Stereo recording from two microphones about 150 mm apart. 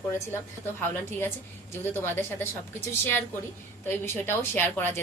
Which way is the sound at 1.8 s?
15° left (ahead or behind).